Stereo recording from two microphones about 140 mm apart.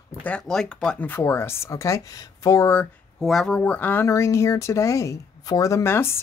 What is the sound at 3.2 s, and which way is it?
Speech, 5° left (ahead or behind).